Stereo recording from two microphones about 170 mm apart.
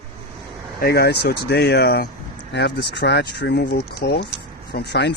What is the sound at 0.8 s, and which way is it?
Speech, 65° left (ahead or behind).